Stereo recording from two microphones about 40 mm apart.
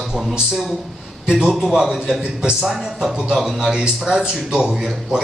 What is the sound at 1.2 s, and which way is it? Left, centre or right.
A man's voice, centre.